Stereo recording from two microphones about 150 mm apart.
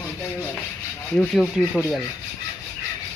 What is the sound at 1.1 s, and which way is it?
Speech, centre (ahead or behind).